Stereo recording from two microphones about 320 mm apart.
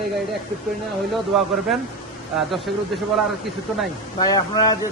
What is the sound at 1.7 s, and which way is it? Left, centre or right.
Speech, centre.